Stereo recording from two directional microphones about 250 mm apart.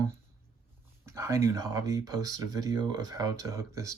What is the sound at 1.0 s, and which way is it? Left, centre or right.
Speech, centre.